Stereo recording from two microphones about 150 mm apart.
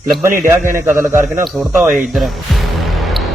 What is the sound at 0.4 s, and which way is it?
Speech, 15° right (ahead or behind).